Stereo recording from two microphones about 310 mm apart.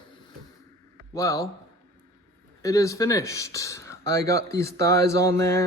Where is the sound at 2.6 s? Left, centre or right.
Centre.